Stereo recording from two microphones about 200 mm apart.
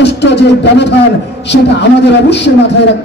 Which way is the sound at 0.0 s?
60° left (ahead or behind).